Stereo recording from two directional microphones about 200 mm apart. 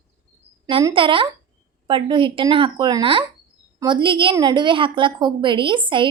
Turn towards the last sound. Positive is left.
turn(degrees=-25)  # may be behind; listen again after turning